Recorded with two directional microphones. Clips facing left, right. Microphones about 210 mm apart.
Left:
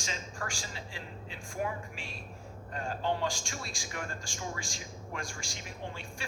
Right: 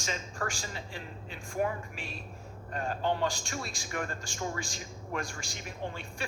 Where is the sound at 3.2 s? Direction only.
60° right (ahead or behind).